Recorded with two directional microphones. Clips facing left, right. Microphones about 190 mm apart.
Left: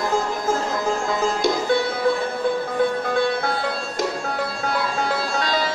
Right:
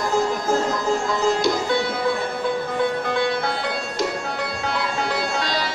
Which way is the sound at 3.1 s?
50° left (ahead or behind).